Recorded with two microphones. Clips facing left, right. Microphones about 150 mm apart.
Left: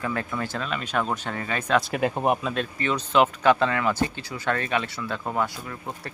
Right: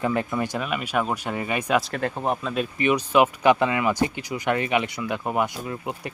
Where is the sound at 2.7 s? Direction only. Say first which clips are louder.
Right 3 dB; 15° right (ahead or behind).